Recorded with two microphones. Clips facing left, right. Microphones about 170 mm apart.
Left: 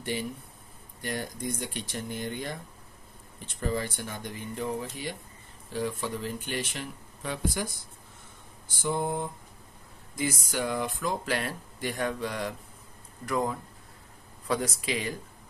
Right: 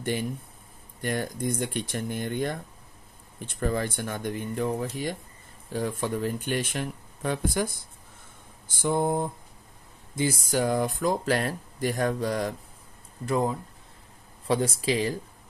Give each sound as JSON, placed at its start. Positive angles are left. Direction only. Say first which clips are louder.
{"t": 1.0, "sound": "speech", "louder": "right 5 dB", "side_deg": -50}
{"t": 3.6, "sound": "speech", "louder": "right 3 dB", "side_deg": -55}
{"t": 8.6, "sound": "speech", "louder": "right 4 dB", "side_deg": -50}
{"t": 10.1, "sound": "speech", "louder": "right 5 dB", "side_deg": -30}
{"t": 13.2, "sound": "speech", "louder": "right 3 dB", "side_deg": -25}